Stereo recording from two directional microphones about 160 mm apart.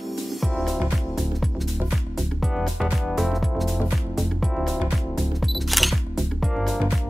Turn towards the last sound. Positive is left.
turn(degrees=0)  # may be behind; listen again after turning